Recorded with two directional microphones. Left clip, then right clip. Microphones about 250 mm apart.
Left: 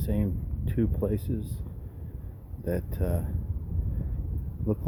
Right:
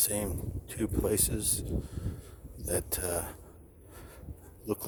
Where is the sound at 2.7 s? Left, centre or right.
Right.